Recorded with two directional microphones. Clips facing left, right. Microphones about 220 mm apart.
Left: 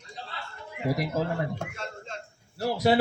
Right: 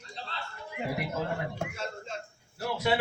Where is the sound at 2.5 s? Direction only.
35° left (ahead or behind).